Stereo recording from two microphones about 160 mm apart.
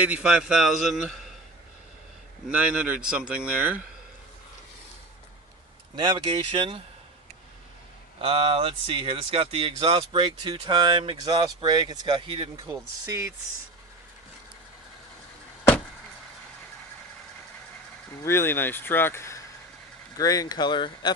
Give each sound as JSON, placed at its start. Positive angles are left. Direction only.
{"t": 0.0, "sound": "a man's voice", "side_deg": -5}
{"t": 2.4, "sound": "speech", "side_deg": -5}
{"t": 5.9, "sound": "speech", "side_deg": -30}
{"t": 8.2, "sound": "speech", "side_deg": -35}
{"t": 13.1, "sound": "speech", "side_deg": -20}
{"t": 18.2, "sound": "speech", "side_deg": 15}